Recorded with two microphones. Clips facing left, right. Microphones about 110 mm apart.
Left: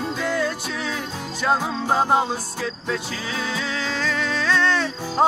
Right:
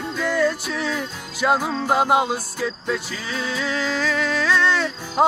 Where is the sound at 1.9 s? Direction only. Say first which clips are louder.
Right 1 dB; 15° right (ahead or behind).